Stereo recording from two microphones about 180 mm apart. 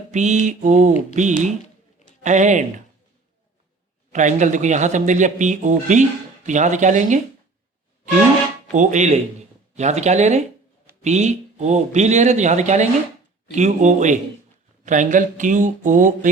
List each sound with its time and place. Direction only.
0.1 s speech: 40° right (ahead or behind)
4.1 s speech: 45° right (ahead or behind)
8.7 s speech: 45° right (ahead or behind)